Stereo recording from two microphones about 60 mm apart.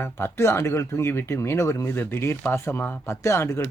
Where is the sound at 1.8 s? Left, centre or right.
Left.